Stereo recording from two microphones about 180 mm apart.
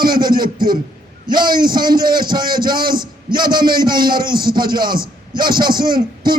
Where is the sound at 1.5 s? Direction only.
55° right (ahead or behind).